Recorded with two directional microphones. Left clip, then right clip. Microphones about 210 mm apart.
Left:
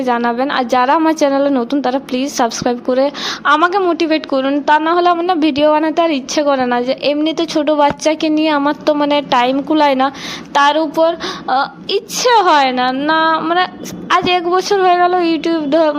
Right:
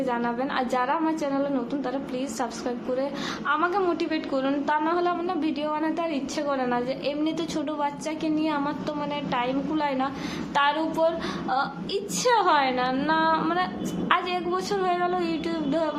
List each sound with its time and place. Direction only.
0.0 s a woman's voice: 45° left (ahead or behind)